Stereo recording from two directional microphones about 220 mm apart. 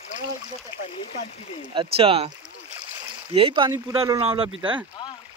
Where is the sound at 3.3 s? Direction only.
25° right (ahead or behind).